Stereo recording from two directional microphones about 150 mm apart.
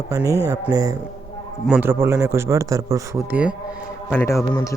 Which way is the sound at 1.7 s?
10° right (ahead or behind).